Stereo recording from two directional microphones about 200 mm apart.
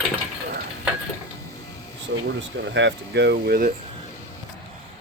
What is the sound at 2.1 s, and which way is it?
Speech, 60° right (ahead or behind).